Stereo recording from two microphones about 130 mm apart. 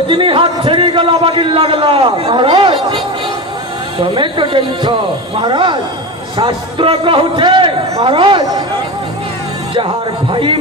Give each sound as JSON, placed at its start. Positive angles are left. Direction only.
{"t": 0.1, "sound": "a man's voice", "side_deg": -40}
{"t": 4.0, "sound": "a man's voice", "side_deg": -40}
{"t": 10.3, "sound": "a man's voice", "side_deg": -40}